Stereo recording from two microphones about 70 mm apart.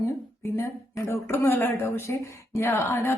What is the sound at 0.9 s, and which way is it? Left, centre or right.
Speech, left.